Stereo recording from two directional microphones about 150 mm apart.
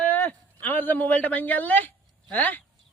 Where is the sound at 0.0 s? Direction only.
10° left (ahead or behind).